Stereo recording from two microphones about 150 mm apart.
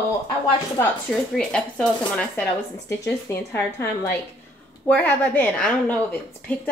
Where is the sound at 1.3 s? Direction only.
5° left (ahead or behind).